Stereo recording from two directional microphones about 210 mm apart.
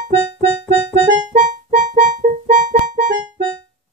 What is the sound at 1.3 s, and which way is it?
Music, 35° right (ahead or behind).